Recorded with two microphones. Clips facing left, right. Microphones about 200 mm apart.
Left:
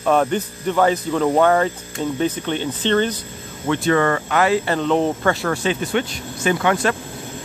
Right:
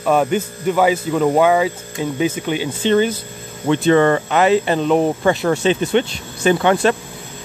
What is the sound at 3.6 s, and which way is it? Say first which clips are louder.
Speech: right 4 dB; 20° right (ahead or behind).